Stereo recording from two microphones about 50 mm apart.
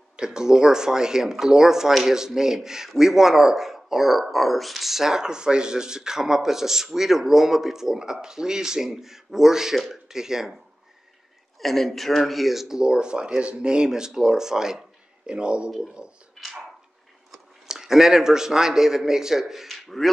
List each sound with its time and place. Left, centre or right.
0.2 s speech: centre
11.6 s speech: centre
17.3 s speech: centre